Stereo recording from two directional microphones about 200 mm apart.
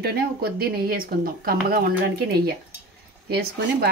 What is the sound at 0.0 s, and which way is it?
Speech, 50° right (ahead or behind).